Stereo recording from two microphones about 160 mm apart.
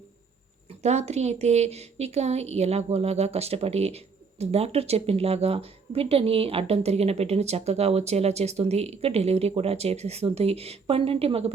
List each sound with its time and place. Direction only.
0.8 s a woman's voice: 45° right (ahead or behind)